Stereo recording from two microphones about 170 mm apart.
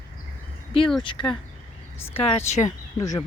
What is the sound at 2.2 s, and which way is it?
Speech, 35° left (ahead or behind).